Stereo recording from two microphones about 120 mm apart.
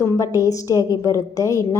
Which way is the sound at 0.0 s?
25° left (ahead or behind).